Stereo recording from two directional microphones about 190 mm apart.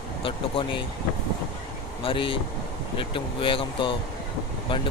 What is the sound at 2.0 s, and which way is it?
Speech, 25° left (ahead or behind).